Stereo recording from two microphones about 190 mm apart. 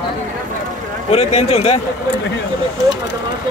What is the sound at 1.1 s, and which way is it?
Speech, 30° left (ahead or behind).